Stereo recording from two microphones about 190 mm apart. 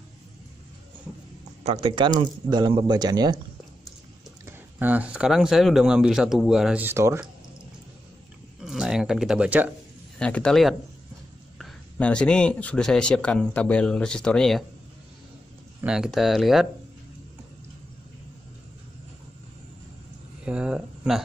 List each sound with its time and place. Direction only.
1.6 s a man's voice: 30° right (ahead or behind)
4.5 s speech: 10° right (ahead or behind)
8.5 s a sound: 5° right (ahead or behind)
10.1 s speech: 5° left (ahead or behind)
15.8 s speech: 5° right (ahead or behind)
20.4 s a sound: 5° right (ahead or behind)